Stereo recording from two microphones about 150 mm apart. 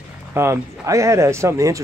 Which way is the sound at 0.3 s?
15° right (ahead or behind).